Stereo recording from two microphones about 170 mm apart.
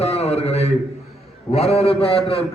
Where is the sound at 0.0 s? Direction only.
40° left (ahead or behind).